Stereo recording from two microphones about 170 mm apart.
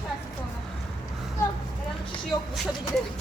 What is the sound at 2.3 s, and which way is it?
Speech, centre (ahead or behind).